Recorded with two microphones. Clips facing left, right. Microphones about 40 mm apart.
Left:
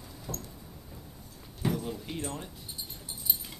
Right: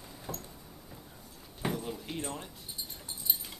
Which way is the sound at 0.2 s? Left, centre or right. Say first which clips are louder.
Left 1 dB; centre.